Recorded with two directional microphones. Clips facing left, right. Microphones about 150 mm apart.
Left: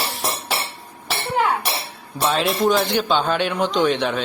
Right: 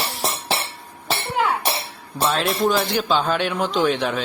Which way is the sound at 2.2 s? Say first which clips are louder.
Left 1 dB; centre (ahead or behind).